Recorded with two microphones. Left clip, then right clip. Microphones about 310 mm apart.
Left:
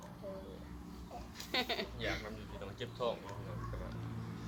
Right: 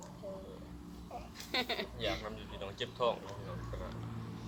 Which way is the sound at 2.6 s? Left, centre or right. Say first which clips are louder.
Right 5 dB; centre.